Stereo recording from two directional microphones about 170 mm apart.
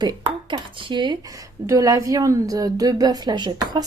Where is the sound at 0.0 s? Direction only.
25° right (ahead or behind).